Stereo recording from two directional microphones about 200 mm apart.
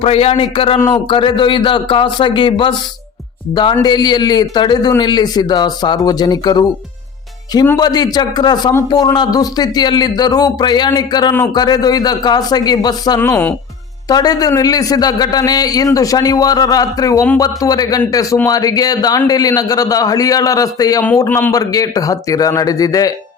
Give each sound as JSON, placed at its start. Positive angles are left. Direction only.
{"t": 0.0, "sound": "a man's voice", "side_deg": 30}